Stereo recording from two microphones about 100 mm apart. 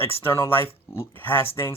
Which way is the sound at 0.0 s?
25° left (ahead or behind).